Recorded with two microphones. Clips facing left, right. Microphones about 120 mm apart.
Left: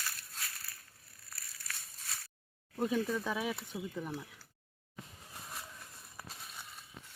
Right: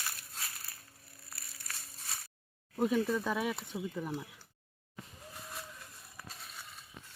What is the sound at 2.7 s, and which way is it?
Speech, 5° right (ahead or behind).